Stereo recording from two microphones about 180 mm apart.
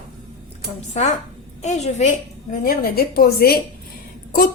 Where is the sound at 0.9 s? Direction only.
40° left (ahead or behind).